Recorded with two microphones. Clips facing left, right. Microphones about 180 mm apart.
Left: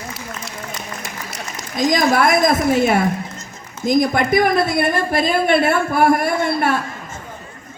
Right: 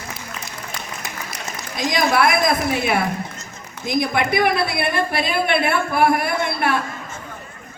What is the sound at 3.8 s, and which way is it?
A woman's voice, 45° left (ahead or behind).